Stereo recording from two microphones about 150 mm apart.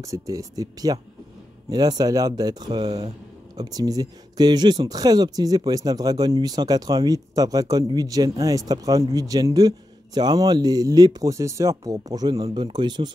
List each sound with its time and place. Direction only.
0.0 s speech: 20° right (ahead or behind)